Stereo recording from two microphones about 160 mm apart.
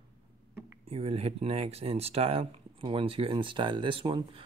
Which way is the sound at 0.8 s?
40° right (ahead or behind).